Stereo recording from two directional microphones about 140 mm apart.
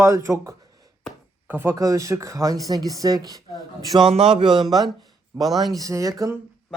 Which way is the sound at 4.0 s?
40° right (ahead or behind).